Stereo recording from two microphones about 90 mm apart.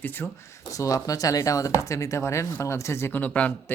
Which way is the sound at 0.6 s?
35° left (ahead or behind).